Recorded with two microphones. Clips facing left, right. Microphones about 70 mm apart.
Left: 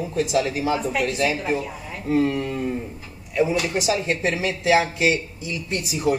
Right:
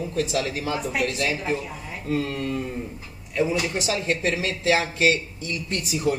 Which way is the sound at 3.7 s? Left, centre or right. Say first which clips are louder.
Left 3 dB; centre.